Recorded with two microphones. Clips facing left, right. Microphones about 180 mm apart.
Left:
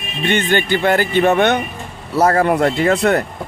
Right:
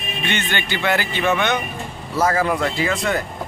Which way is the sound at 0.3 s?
50° left (ahead or behind).